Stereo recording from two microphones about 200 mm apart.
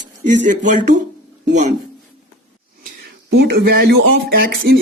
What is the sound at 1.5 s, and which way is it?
Speech, 35° right (ahead or behind).